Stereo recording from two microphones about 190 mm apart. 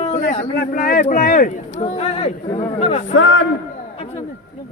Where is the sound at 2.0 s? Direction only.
30° left (ahead or behind).